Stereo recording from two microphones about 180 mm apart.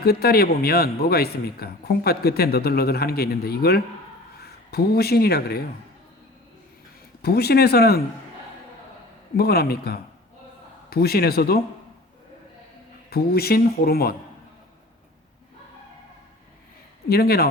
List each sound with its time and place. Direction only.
0.0 s a man's voice: 60° left (ahead or behind)
7.2 s a man's voice: 60° left (ahead or behind)
9.3 s a man's voice: 60° left (ahead or behind)
13.1 s a man's voice: 60° left (ahead or behind)
17.1 s a man's voice: 60° left (ahead or behind)